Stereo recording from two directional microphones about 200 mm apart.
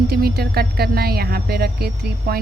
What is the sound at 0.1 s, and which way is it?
Speech, 50° right (ahead or behind).